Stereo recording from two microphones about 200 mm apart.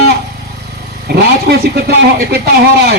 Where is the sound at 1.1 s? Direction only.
50° right (ahead or behind).